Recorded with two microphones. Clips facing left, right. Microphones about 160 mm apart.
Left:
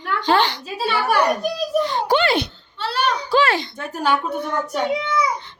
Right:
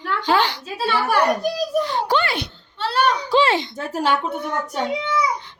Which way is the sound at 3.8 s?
30° right (ahead or behind).